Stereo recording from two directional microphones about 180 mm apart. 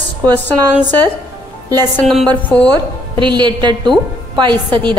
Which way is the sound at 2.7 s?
25° right (ahead or behind).